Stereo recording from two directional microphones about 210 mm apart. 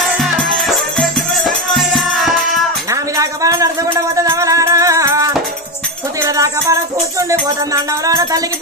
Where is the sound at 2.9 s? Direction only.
15° right (ahead or behind).